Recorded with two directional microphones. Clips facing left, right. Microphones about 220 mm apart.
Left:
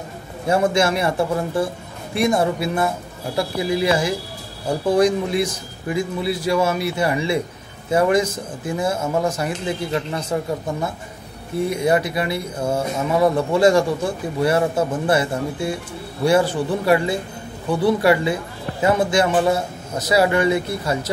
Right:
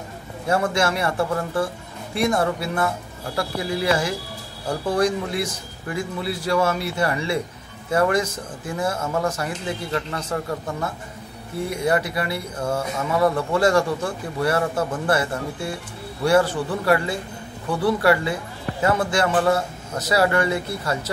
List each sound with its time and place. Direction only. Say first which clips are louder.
0.5 s speech: left 3 dB; 15° left (ahead or behind)